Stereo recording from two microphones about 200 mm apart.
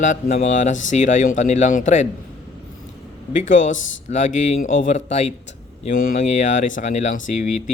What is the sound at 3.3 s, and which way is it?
Speech, 40° left (ahead or behind).